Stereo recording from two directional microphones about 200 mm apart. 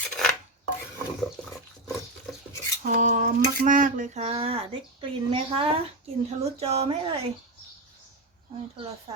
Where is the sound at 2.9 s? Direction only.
40° right (ahead or behind).